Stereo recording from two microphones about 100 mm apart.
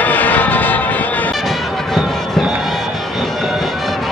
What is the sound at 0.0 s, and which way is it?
Music, 15° left (ahead or behind).